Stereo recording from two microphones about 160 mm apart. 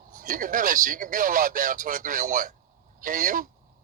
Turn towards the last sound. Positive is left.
turn(degrees=-55)  # may be behind; listen again after turning